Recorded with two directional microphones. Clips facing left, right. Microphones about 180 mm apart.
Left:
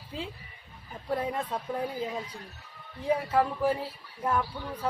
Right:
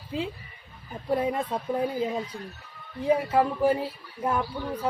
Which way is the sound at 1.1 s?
15° right (ahead or behind).